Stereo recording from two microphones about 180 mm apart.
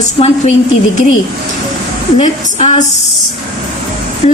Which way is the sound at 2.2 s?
40° left (ahead or behind).